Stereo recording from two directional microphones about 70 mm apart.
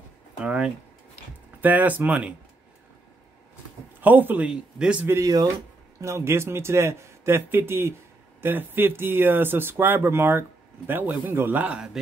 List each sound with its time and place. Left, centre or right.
0.4 s a man's voice: centre
4.0 s a man's voice: right
4.5 s speech: centre
5.2 s speech: right
5.9 s a man's voice: right